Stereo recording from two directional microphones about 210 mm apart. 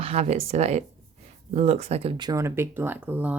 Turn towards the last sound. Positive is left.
turn(degrees=-5)  # may be behind; listen again after turning